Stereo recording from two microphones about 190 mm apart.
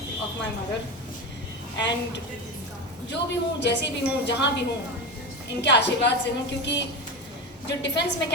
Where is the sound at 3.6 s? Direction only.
65° left (ahead or behind).